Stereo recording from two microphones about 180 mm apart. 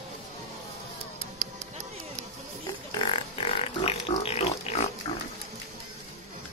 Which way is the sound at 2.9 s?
30° left (ahead or behind).